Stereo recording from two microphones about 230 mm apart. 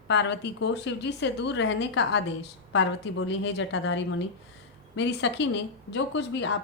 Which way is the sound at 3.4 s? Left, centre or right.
Left.